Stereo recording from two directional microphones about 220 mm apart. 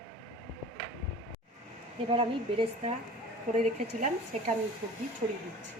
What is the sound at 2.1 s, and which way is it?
Speech, 25° right (ahead or behind).